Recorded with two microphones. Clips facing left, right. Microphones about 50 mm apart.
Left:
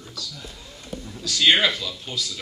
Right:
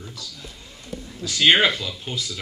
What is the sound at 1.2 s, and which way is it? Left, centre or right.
Speech, right.